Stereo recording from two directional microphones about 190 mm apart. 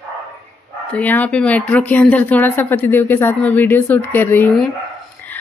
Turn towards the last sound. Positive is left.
turn(degrees=10)  # may be behind; listen again after turning